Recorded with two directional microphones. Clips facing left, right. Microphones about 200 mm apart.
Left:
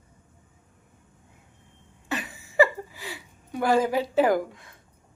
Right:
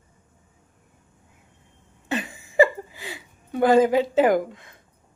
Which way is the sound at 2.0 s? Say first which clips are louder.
Right 4 dB; 20° right (ahead or behind).